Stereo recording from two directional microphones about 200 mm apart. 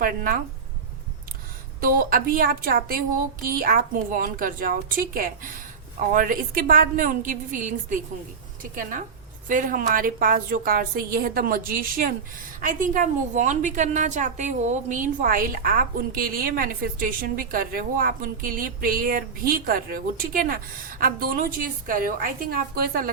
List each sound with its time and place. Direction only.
0.0 s a woman's voice: 45° right (ahead or behind)
1.8 s a woman's voice: 45° right (ahead or behind)